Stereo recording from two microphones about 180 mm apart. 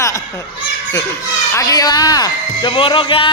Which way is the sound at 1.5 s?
20° left (ahead or behind).